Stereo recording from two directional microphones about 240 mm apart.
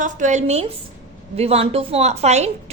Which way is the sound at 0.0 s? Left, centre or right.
Right.